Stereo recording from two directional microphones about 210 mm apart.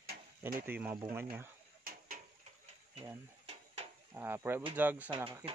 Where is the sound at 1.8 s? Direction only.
45° right (ahead or behind).